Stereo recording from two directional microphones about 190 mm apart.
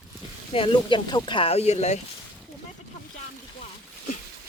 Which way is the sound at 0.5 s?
25° left (ahead or behind).